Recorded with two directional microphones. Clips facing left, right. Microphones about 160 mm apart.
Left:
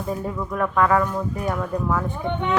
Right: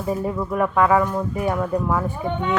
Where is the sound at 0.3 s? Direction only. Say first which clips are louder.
Right 3 dB; 15° right (ahead or behind).